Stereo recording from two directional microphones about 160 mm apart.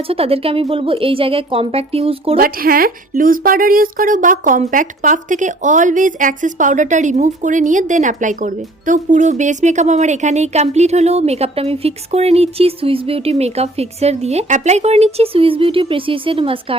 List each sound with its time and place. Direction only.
0.1 s speech: 35° right (ahead or behind)
2.4 s speech: 65° right (ahead or behind); by 16.7 s 35° right (ahead or behind)